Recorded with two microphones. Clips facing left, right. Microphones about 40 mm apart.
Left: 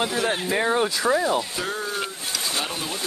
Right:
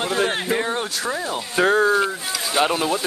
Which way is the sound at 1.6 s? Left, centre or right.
Right.